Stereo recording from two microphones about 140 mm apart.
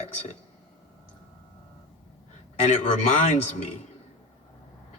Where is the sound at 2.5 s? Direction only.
55° left (ahead or behind).